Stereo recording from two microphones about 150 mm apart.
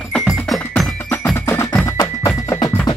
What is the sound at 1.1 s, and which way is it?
Percussion, 15° left (ahead or behind).